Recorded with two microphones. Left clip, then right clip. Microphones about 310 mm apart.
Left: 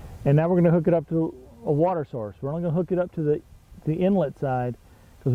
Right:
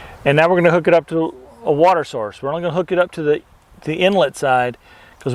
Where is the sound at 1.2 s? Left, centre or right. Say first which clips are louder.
Right 8 dB; right.